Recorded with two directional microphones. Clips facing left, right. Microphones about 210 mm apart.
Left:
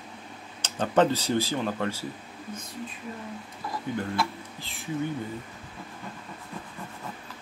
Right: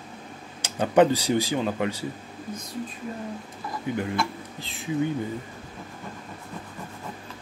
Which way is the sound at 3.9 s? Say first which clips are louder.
Right 3 dB; 15° right (ahead or behind).